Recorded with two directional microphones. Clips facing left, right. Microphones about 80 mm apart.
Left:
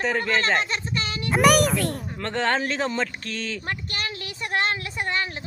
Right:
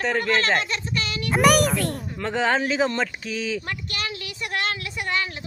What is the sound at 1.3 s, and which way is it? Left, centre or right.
Speech, centre.